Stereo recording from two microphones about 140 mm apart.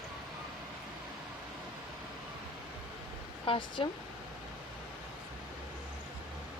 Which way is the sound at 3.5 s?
40° left (ahead or behind).